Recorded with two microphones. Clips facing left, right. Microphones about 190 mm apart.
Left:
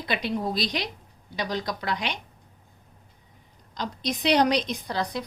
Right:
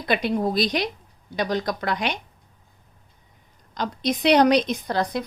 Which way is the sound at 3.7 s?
55° right (ahead or behind).